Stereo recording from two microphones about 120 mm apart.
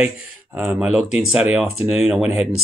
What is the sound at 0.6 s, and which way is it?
Speech, 5° right (ahead or behind).